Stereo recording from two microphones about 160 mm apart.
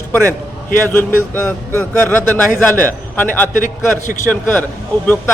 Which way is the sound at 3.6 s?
55° left (ahead or behind).